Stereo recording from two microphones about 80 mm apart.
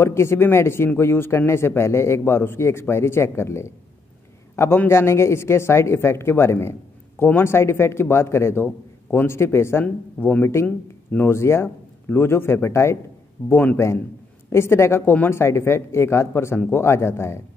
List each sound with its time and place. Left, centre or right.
0.0 s speech: left
13.4 s a man's voice: left
14.5 s speech: left